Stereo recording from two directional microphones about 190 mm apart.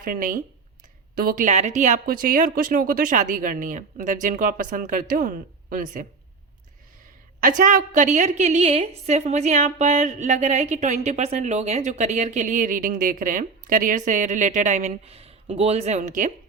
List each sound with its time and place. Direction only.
0.0 s speech: 45° right (ahead or behind)
7.4 s a woman's voice: 45° right (ahead or behind)